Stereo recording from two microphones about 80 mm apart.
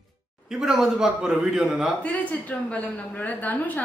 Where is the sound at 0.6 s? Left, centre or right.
Centre.